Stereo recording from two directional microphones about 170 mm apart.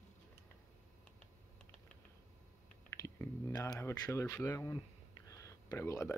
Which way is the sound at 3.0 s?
20° left (ahead or behind).